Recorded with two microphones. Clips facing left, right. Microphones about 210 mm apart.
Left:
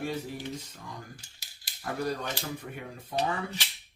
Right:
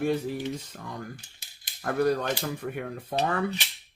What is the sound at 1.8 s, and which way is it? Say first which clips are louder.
Speech: right 7 dB; 60° right (ahead or behind).